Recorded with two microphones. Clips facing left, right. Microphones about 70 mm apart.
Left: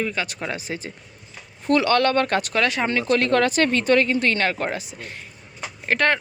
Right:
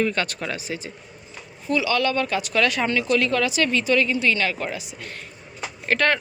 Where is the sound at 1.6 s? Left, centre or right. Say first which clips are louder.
Left 4 dB; left.